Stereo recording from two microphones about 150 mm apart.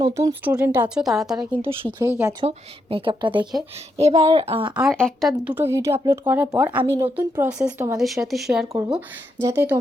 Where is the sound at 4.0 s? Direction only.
45° right (ahead or behind).